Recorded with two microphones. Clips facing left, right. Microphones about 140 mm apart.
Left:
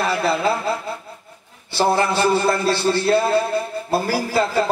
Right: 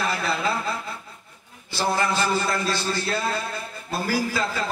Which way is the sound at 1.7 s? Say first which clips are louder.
Left 6 dB; 30° left (ahead or behind).